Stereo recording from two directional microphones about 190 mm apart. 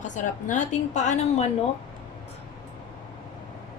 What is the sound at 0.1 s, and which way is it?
A woman's voice, 40° left (ahead or behind).